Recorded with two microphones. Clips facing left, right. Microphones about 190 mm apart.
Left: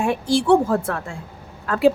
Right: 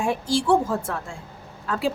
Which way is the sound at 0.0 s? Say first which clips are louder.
Left 3 dB; 60° left (ahead or behind).